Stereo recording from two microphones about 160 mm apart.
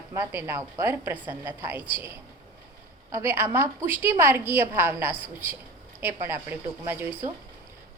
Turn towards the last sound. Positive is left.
turn(degrees=-15)  # may be behind; listen again after turning